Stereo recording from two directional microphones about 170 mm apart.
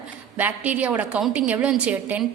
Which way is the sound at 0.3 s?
10° right (ahead or behind).